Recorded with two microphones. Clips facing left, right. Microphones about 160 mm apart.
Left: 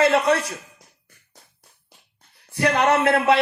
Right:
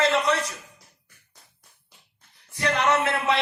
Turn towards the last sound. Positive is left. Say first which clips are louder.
# left 6 dB
turn(degrees=60)  # may be behind; listen again after turning